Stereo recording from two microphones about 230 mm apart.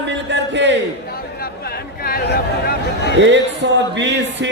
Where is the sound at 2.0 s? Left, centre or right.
Left.